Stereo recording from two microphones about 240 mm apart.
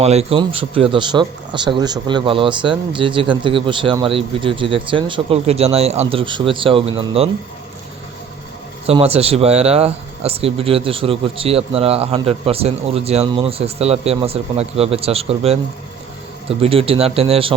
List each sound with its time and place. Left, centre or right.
0.0 s speech: right
8.9 s speech: right